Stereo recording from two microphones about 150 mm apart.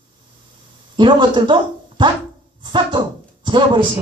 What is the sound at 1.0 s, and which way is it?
A man's voice, 35° right (ahead or behind).